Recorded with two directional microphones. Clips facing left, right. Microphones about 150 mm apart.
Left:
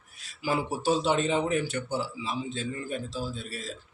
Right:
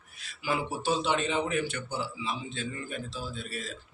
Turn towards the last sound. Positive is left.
turn(degrees=40)  # may be behind; listen again after turning